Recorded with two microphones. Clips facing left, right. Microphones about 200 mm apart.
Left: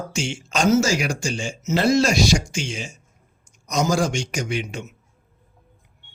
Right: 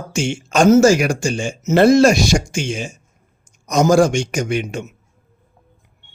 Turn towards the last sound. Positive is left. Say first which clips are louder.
# right 6 dB
turn(degrees=-50)  # may be behind; listen again after turning